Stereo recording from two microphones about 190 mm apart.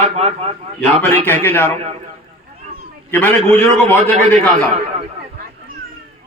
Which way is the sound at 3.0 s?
10° left (ahead or behind).